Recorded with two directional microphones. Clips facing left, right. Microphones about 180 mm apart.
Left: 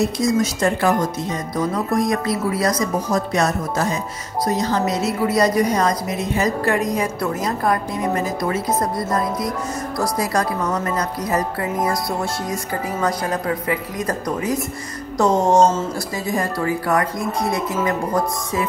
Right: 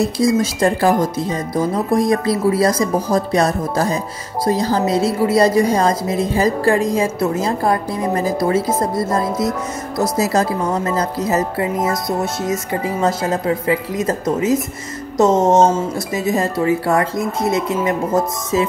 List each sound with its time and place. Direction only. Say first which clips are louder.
0.0 s a woman's voice: right 3 dB; 30° right (ahead or behind)